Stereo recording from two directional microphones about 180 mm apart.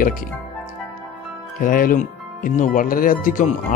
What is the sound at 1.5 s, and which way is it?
Speech, 50° left (ahead or behind).